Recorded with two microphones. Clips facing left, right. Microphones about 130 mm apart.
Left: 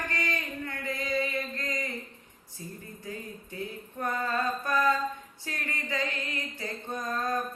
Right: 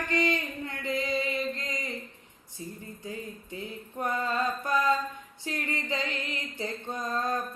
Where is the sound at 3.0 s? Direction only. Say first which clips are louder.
Right 1 dB; 20° right (ahead or behind).